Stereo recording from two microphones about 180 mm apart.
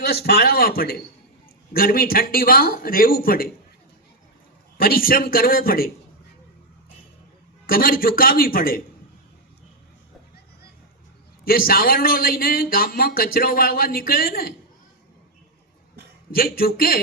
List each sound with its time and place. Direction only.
0.0 s a man's voice: 60° left (ahead or behind)
4.8 s a man's voice: 55° left (ahead or behind)
7.7 s a man's voice: 55° left (ahead or behind)
11.4 s a man's voice: 55° left (ahead or behind)
16.3 s a man's voice: 55° left (ahead or behind)